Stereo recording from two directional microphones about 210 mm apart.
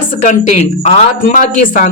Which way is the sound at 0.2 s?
35° left (ahead or behind).